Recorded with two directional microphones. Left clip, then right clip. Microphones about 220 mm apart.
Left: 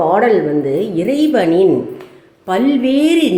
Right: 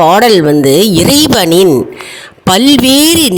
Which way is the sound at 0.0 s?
50° right (ahead or behind).